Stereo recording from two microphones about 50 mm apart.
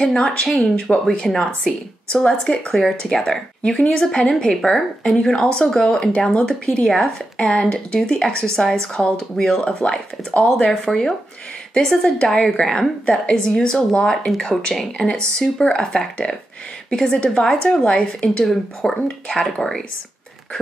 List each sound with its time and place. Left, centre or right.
0.0 s a woman's voice: centre
4.6 s a woman's voice: centre
5.3 s speech: centre
6.9 s speech: centre; by 10.7 s left
10.7 s speech: centre
14.1 s speech: centre
18.4 s speech: centre